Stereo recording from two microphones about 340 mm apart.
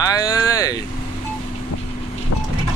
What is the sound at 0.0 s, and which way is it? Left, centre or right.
Vehicle, centre.